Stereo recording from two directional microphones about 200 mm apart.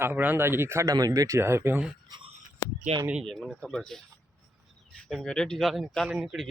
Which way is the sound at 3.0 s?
Centre (ahead or behind).